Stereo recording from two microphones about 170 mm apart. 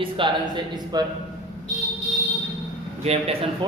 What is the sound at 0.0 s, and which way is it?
A man's voice, 30° right (ahead or behind).